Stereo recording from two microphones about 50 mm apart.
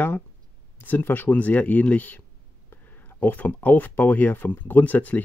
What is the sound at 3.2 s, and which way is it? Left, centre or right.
Speech, left.